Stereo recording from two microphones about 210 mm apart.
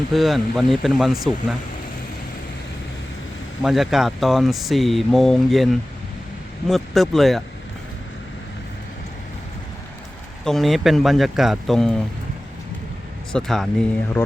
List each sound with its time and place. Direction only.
0.1 s speech: centre (ahead or behind)
3.6 s speech: centre (ahead or behind)
6.7 s speech: centre (ahead or behind)
10.4 s speech: centre (ahead or behind)
13.3 s speech: centre (ahead or behind)